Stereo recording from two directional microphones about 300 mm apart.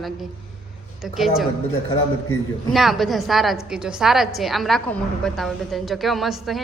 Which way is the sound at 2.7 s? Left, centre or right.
Centre.